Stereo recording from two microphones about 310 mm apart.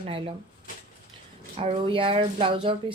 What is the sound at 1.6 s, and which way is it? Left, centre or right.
Speech, centre.